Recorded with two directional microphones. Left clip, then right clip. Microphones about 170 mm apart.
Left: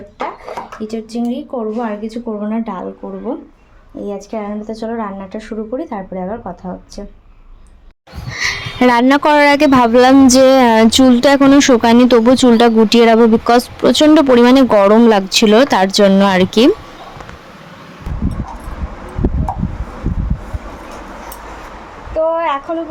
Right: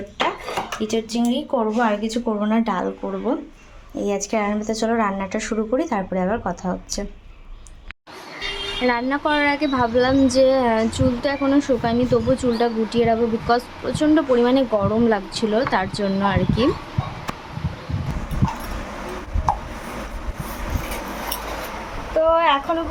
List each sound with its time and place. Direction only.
0.8 s a woman's voice: 15° left (ahead or behind)
8.4 s speech: 60° left (ahead or behind)
22.3 s a sound: centre (ahead or behind)